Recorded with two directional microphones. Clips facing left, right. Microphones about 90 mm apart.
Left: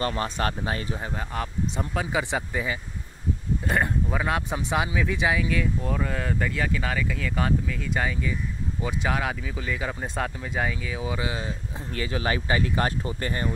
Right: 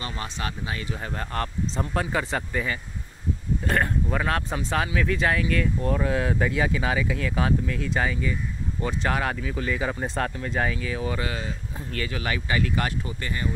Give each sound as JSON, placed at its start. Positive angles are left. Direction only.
{"t": 0.0, "sound": "speech", "side_deg": 45}
{"t": 1.0, "sound": "speech", "side_deg": 5}
{"t": 5.9, "sound": "speech", "side_deg": -5}